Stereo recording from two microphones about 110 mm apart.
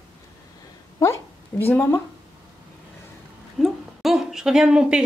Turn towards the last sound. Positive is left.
turn(degrees=-10)  # may be behind; listen again after turning